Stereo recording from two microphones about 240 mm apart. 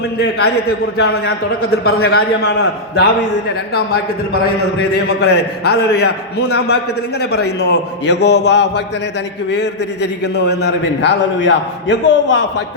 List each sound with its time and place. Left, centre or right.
0.2 s a man's voice: left
4.8 s a man's voice: left